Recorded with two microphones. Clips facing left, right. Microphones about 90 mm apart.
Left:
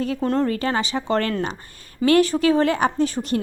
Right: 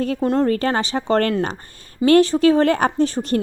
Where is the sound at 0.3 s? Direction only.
40° right (ahead or behind).